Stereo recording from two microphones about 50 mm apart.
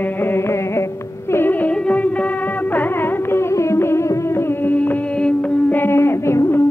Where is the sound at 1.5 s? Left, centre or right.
Left.